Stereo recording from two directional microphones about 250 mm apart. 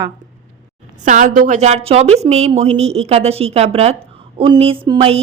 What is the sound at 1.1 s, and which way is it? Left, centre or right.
A woman's voice, right.